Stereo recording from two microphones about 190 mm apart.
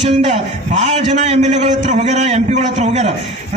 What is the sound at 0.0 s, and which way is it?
A man's voice, 40° right (ahead or behind).